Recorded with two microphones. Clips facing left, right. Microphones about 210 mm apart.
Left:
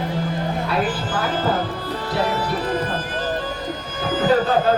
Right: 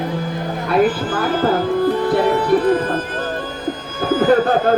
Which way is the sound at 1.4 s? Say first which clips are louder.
Right 7 dB; 55° right (ahead or behind).